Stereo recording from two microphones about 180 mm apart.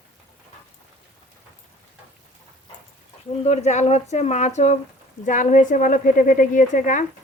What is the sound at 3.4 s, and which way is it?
A woman's voice, 40° left (ahead or behind).